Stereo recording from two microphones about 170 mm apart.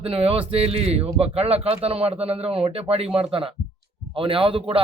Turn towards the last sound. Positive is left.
turn(degrees=-30)  # may be behind; listen again after turning